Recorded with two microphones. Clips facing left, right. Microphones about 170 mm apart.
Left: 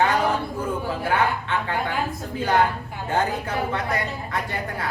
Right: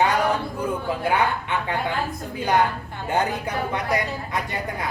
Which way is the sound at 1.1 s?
15° right (ahead or behind).